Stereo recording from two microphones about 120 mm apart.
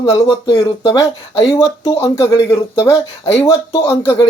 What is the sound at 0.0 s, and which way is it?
Speech, 45° left (ahead or behind).